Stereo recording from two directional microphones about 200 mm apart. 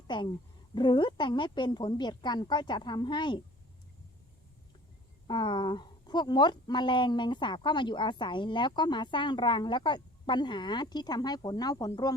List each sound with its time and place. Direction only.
0.1 s speech: 25° left (ahead or behind)
5.3 s speech: 20° left (ahead or behind)